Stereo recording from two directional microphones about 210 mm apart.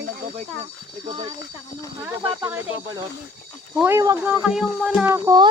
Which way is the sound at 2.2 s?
10° right (ahead or behind).